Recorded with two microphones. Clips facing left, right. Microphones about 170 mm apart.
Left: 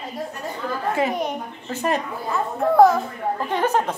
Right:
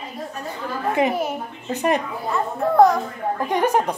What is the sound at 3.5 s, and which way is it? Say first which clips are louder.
Speech: right 2 dB; 15° right (ahead or behind).